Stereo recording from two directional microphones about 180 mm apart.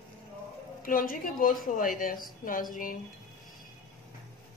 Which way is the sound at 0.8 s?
50° left (ahead or behind).